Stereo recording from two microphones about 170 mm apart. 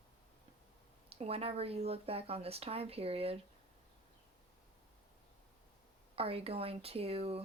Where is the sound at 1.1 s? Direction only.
35° right (ahead or behind).